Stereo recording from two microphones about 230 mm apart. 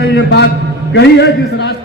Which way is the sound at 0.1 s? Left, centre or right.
Left.